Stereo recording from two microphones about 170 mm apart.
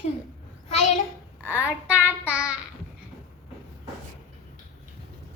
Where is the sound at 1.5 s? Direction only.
10° right (ahead or behind).